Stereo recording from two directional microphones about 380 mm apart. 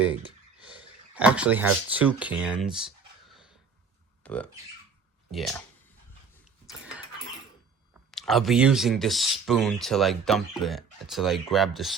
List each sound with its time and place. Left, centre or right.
1.1 s speech: centre
4.2 s a sound: centre
5.3 s speech: centre
8.1 s speech: centre